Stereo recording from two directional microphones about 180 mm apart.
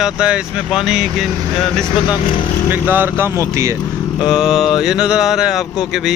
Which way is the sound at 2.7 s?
10° right (ahead or behind).